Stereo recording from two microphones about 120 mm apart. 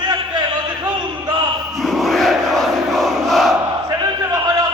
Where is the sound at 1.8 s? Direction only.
Centre (ahead or behind).